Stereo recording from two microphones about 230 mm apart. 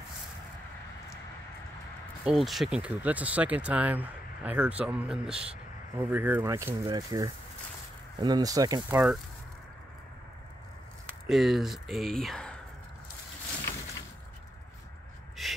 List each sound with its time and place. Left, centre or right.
2.2 s speech: centre
11.2 s speech: centre
15.4 s snort: centre